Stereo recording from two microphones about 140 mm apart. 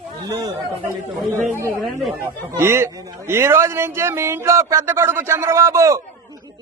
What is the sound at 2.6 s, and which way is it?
A man's voice, 20° right (ahead or behind).